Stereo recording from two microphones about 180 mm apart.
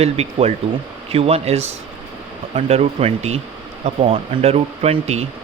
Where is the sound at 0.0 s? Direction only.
35° right (ahead or behind).